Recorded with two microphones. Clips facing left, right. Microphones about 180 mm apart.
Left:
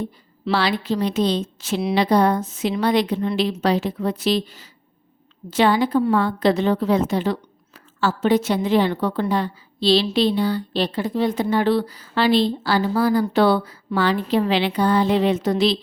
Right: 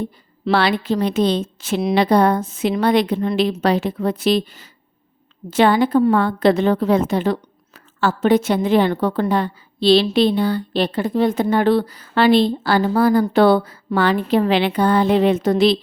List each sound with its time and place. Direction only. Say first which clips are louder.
0.4 s a woman's voice: right 3 dB; 55° right (ahead or behind)